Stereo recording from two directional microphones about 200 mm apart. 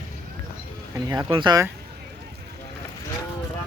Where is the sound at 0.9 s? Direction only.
20° right (ahead or behind).